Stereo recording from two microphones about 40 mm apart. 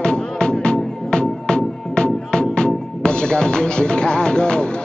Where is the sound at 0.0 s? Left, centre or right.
Left.